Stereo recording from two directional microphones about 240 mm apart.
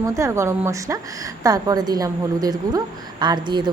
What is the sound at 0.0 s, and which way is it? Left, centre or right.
A woman's voice, centre.